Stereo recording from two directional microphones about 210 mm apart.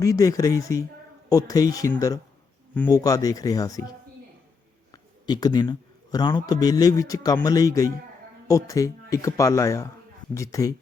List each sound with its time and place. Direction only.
0.0 s speech: 15° left (ahead or behind)
4.9 s a sound: 20° left (ahead or behind)
6.3 s speech: 15° left (ahead or behind)